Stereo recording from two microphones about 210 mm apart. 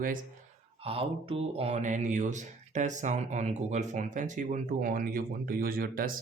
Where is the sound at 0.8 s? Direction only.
25° right (ahead or behind).